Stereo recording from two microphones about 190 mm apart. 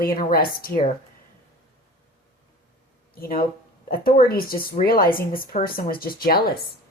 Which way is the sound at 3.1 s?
50° left (ahead or behind).